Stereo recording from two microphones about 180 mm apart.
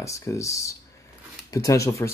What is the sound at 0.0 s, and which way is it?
Speech, 15° left (ahead or behind).